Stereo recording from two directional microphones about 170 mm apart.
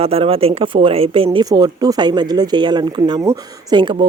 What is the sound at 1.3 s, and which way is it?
Speech, 25° right (ahead or behind).